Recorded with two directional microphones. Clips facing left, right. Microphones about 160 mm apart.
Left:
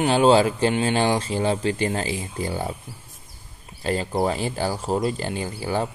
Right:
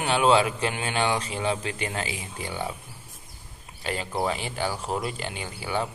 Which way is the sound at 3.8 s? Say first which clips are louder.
Left 5 dB; 35° left (ahead or behind).